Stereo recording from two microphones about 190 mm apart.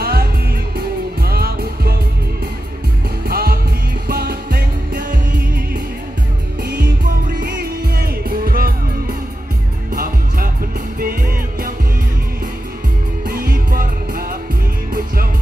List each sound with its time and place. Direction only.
0.0 s music: 55° right (ahead or behind)
3.3 s music: 55° right (ahead or behind)
6.8 s music: 50° right (ahead or behind)
13.3 s music: 50° right (ahead or behind)